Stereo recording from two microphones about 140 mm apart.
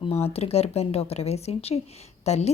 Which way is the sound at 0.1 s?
45° left (ahead or behind).